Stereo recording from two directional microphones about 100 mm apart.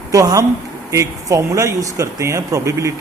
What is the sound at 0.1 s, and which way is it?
Speech, 35° right (ahead or behind).